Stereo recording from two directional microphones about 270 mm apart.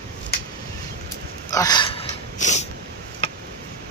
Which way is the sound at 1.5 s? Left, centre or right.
Centre.